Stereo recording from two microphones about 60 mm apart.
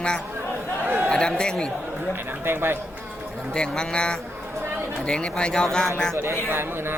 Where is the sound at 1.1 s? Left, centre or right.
Centre.